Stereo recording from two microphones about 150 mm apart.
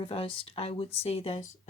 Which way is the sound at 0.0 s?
35° left (ahead or behind).